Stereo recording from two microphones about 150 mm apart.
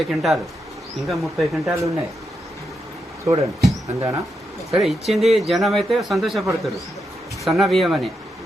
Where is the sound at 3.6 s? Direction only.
20° right (ahead or behind).